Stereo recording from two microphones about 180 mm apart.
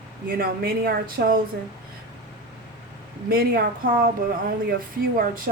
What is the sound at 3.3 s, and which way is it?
Speech, 55° right (ahead or behind).